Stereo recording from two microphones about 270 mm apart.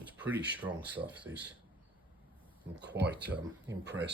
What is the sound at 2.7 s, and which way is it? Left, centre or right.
Speech, right.